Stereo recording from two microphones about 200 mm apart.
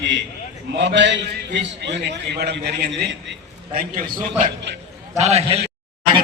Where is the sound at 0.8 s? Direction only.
60° right (ahead or behind).